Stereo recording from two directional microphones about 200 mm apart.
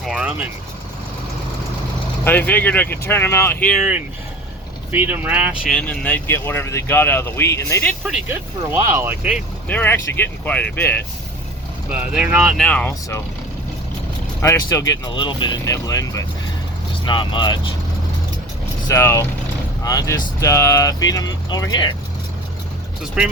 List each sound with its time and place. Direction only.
0.0 s vehicle: centre (ahead or behind)
2.2 s speech: 10° left (ahead or behind)
4.9 s speech: 10° right (ahead or behind)
5.6 s speech: 5° left (ahead or behind)
8.7 s speech: 15° right (ahead or behind)
9.6 s speech: 10° left (ahead or behind)
11.9 s speech: 5° right (ahead or behind)
12.6 s speech: 5° left (ahead or behind)
14.4 s speech: 15° left (ahead or behind)
18.9 s speech: 15° left (ahead or behind)